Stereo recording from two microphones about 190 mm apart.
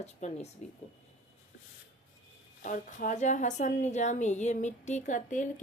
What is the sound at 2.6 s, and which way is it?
A woman's voice, 45° left (ahead or behind).